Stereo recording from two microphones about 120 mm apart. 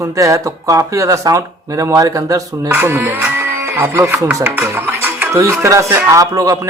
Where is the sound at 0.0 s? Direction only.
25° right (ahead or behind).